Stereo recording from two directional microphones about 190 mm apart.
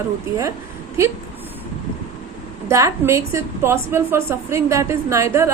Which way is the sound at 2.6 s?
15° right (ahead or behind).